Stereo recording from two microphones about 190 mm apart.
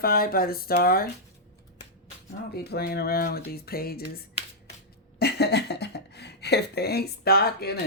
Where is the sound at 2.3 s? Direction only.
55° left (ahead or behind).